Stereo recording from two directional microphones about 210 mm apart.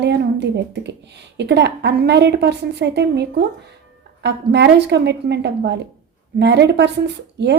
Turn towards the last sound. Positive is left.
turn(degrees=-55)  # may be behind; listen again after turning